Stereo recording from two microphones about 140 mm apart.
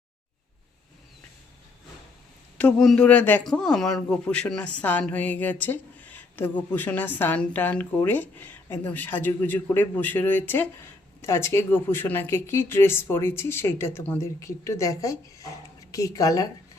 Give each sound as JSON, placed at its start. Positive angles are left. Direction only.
{"t": 2.6, "sound": "a woman's voice", "side_deg": 5}